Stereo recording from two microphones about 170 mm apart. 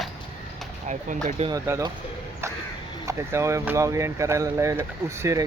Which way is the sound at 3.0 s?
15° right (ahead or behind).